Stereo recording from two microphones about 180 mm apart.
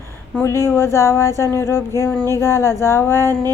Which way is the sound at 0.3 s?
15° left (ahead or behind).